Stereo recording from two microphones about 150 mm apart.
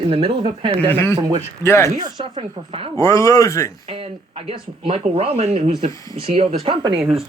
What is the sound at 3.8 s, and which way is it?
Speech, 35° right (ahead or behind).